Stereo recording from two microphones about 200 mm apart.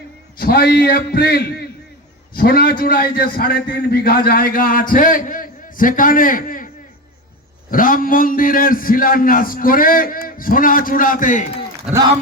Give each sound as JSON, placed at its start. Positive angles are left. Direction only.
{"t": 0.3, "sound": "a man's voice", "side_deg": 50}
{"t": 7.7, "sound": "a man's voice", "side_deg": 45}
{"t": 11.9, "sound": "speech", "side_deg": -5}